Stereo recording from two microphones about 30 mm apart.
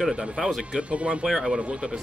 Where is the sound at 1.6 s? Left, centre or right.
Right.